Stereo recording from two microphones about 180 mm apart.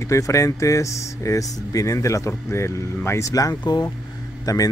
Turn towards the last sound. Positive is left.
turn(degrees=20)  # may be behind; listen again after turning